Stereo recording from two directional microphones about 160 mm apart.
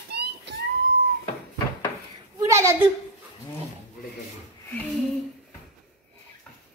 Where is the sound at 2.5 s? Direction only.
15° right (ahead or behind).